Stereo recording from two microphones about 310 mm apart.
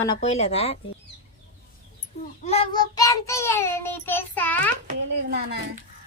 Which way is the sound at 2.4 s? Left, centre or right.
Centre.